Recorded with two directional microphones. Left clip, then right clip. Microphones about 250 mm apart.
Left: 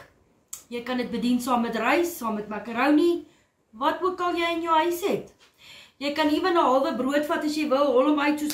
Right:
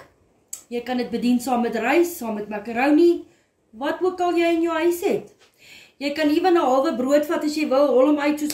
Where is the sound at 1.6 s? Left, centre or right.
Centre.